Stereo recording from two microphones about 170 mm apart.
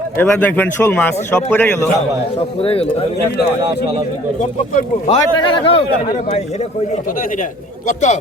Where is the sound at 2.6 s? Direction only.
35° left (ahead or behind).